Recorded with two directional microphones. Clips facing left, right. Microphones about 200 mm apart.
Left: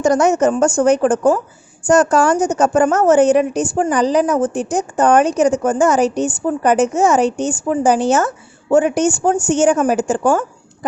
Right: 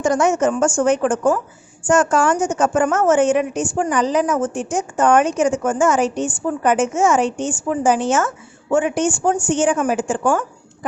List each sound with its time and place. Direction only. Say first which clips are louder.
0.0 s a woman's voice: left 3 dB; 40° left (ahead or behind)